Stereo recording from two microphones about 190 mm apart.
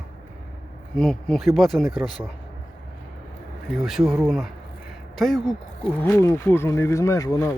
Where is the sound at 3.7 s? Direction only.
Centre (ahead or behind).